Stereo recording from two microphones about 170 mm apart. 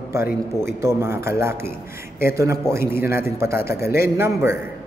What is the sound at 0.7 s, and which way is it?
A man's voice, 15° right (ahead or behind).